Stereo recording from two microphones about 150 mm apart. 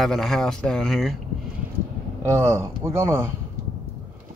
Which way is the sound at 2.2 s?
15° right (ahead or behind).